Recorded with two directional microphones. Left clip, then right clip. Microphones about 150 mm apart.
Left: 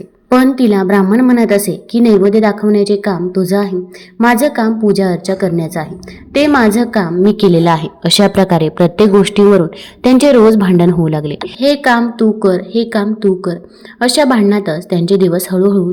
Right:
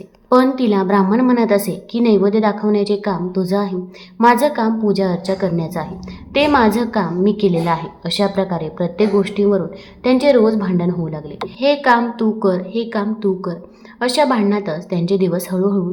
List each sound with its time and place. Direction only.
0.3 s a woman's voice: 25° left (ahead or behind); by 11.3 s 50° left (ahead or behind)
11.6 s a woman's voice: 30° left (ahead or behind)